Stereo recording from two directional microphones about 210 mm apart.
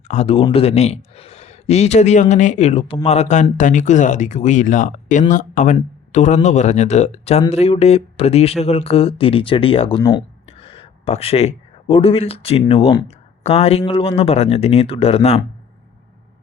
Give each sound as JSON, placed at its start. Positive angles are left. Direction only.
{"t": 0.1, "sound": "speech", "side_deg": 30}